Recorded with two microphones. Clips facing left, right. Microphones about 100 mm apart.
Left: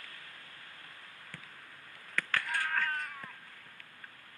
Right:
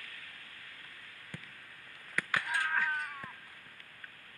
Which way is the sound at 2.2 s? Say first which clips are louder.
Even; 10° right (ahead or behind).